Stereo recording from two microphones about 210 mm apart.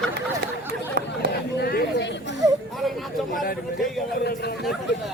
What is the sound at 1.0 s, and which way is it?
Chatter, 50° right (ahead or behind).